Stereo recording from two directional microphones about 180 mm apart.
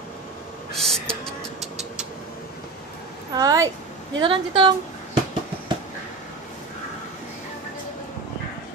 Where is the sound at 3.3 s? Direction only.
20° right (ahead or behind).